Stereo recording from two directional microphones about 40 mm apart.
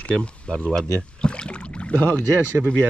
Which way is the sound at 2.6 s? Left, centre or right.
Right.